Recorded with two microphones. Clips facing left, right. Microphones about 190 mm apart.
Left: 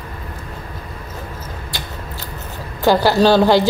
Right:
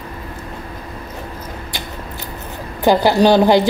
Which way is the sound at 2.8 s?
15° right (ahead or behind).